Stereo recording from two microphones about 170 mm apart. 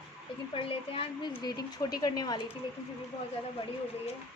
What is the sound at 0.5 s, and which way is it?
Speech, 30° left (ahead or behind).